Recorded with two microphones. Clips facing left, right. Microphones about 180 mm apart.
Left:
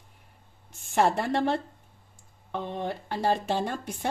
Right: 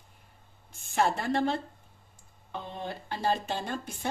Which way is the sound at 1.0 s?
70° left (ahead or behind).